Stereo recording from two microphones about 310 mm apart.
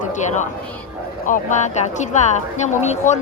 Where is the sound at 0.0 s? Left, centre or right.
Left.